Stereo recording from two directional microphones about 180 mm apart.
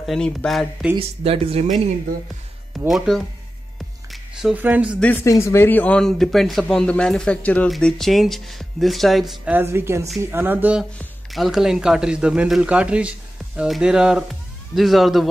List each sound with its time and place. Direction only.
0.0 s speech: 5° left (ahead or behind)
0.9 s speech: 30° right (ahead or behind)
2.9 s speech: centre (ahead or behind)
5.0 s speech: 15° left (ahead or behind)